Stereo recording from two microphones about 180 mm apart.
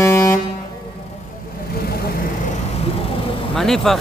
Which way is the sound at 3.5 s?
Centre (ahead or behind).